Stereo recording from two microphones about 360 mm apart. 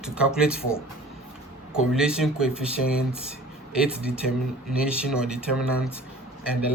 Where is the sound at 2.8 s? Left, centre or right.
Left.